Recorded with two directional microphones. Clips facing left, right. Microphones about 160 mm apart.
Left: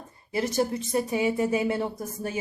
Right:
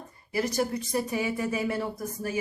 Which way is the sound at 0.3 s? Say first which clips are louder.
Left 2 dB; 25° left (ahead or behind).